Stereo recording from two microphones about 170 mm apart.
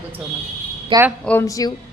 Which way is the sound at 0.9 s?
30° right (ahead or behind).